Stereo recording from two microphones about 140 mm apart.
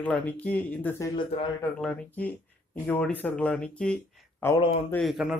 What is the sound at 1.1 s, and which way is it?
Speech, 35° left (ahead or behind).